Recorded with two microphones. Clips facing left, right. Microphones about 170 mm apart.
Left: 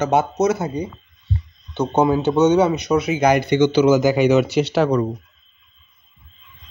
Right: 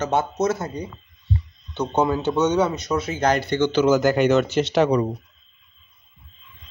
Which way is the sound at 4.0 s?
5° left (ahead or behind).